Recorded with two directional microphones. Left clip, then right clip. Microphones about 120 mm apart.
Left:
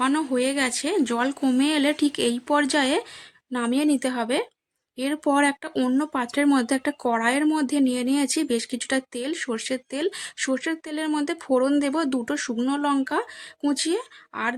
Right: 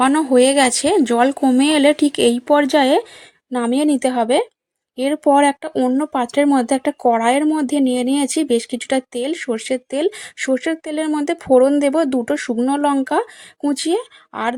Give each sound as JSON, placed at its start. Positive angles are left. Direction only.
{"t": 0.0, "sound": "speech", "side_deg": -40}
{"t": 5.7, "sound": "speech", "side_deg": -10}
{"t": 6.1, "sound": "speech", "side_deg": -20}